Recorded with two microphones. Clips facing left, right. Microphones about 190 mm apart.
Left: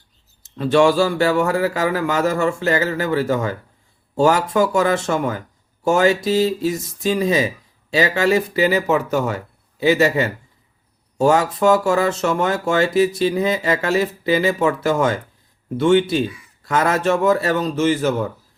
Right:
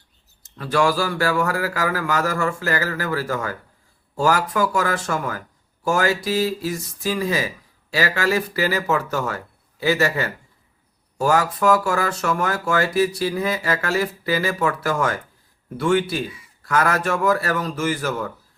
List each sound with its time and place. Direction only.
0.6 s speech: 25° left (ahead or behind)